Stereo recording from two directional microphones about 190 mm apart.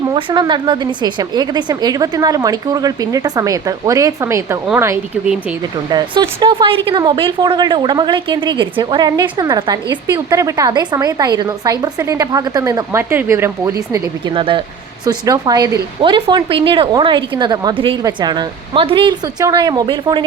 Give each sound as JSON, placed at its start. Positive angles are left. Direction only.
{"t": 0.1, "sound": "a woman's voice", "side_deg": -25}
{"t": 5.9, "sound": "a woman's voice", "side_deg": -20}